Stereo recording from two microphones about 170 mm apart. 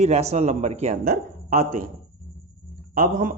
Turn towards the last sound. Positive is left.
turn(degrees=-55)  # may be behind; listen again after turning